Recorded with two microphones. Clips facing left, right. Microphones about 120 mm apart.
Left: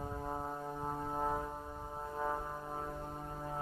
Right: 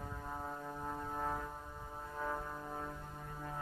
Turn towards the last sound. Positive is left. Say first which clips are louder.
# left 4 dB
turn(degrees=30)  # may be behind; listen again after turning